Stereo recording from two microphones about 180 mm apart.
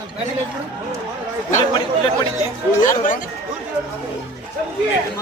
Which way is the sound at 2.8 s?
45° left (ahead or behind).